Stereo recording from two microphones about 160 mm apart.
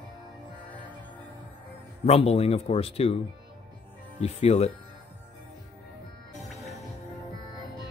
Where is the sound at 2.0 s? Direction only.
40° left (ahead or behind).